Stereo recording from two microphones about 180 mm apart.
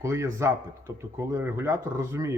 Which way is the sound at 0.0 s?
15° right (ahead or behind).